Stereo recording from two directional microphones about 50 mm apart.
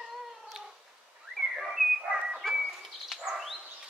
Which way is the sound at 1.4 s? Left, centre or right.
Centre.